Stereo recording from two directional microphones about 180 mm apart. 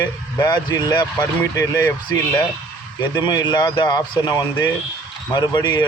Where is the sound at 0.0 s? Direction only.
20° left (ahead or behind).